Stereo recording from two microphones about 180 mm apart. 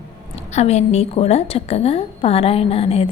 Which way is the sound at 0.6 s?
35° left (ahead or behind).